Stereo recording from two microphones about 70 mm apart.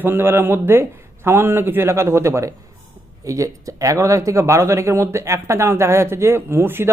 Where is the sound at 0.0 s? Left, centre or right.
Right.